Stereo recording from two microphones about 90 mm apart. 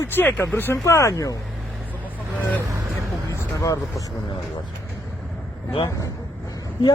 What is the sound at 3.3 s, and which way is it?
Vehicle, 35° left (ahead or behind).